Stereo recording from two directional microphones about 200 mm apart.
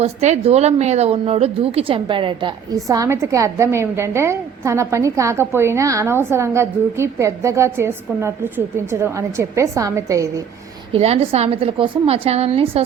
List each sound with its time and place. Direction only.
0.0 s a woman's voice: 35° right (ahead or behind); by 10.4 s 15° right (ahead or behind)
10.9 s a woman's voice: 30° right (ahead or behind)